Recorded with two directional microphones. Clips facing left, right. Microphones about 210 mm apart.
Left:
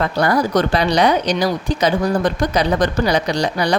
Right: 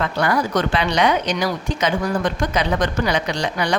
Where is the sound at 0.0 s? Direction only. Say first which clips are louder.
Left 3 dB; 35° left (ahead or behind).